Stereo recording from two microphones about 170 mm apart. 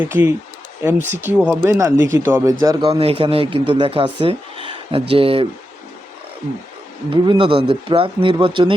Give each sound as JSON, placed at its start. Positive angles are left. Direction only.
{"t": 0.0, "sound": "speech", "side_deg": -15}
{"t": 3.0, "sound": "speech", "side_deg": -35}
{"t": 7.1, "sound": "speech", "side_deg": -30}